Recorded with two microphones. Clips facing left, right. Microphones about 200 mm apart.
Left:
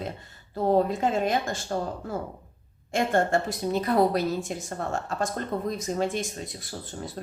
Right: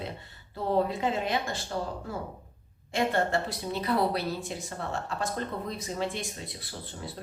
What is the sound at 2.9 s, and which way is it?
A woman's voice, 45° left (ahead or behind).